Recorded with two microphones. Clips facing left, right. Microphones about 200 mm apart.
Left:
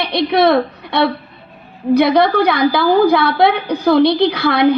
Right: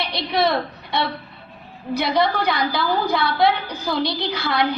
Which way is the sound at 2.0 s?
60° left (ahead or behind).